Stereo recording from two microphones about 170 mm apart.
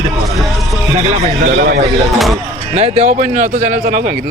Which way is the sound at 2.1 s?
Centre (ahead or behind).